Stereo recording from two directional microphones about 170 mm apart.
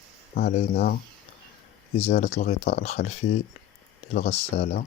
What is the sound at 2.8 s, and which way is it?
Speech, 40° left (ahead or behind).